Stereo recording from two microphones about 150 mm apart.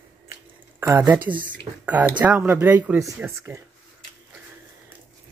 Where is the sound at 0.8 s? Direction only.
15° right (ahead or behind).